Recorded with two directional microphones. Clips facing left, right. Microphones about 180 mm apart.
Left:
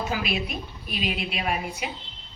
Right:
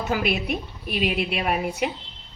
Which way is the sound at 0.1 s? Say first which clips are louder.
Right 4 dB; 60° right (ahead or behind).